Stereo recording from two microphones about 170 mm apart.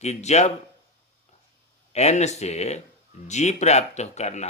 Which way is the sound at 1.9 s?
40° left (ahead or behind).